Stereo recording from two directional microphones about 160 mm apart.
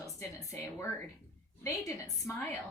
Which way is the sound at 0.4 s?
20° left (ahead or behind).